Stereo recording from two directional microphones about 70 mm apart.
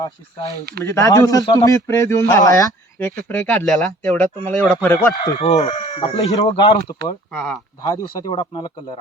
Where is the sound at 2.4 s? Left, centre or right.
Left.